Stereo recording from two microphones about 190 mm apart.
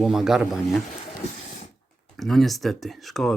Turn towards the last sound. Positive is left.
turn(degrees=0)  # may be behind; listen again after turning